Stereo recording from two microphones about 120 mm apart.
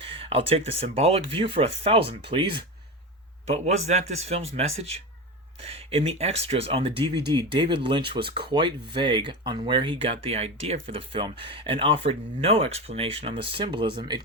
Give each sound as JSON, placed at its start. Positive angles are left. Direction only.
{"t": 0.0, "sound": "speech", "side_deg": -50}
{"t": 2.4, "sound": "speech", "side_deg": -40}
{"t": 3.4, "sound": "speech", "side_deg": -65}